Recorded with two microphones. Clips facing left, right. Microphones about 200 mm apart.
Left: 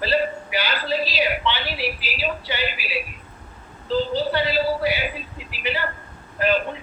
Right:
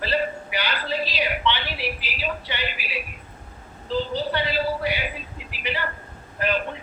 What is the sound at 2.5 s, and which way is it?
Speech, 35° left (ahead or behind).